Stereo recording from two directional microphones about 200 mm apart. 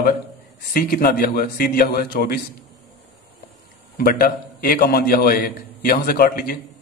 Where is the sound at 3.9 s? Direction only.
45° left (ahead or behind).